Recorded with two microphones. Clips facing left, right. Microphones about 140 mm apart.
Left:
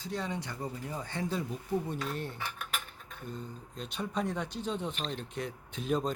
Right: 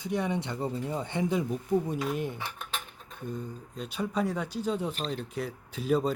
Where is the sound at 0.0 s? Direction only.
20° right (ahead or behind).